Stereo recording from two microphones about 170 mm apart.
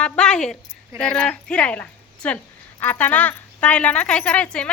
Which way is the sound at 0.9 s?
5° left (ahead or behind).